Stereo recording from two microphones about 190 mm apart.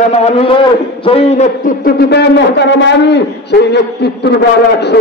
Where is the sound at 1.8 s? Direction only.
60° left (ahead or behind).